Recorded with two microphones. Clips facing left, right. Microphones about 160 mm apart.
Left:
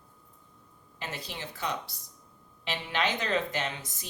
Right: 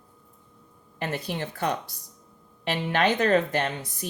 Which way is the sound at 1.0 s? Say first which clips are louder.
Right 9 dB; 55° right (ahead or behind).